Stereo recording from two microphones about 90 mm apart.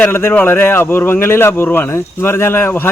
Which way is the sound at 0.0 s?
25° left (ahead or behind).